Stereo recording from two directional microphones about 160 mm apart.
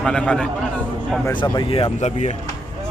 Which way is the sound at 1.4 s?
35° left (ahead or behind).